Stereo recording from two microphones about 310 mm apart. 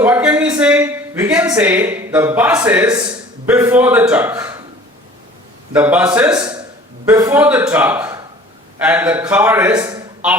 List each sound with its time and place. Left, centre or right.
0.0 s a man's voice: centre
5.7 s a man's voice: centre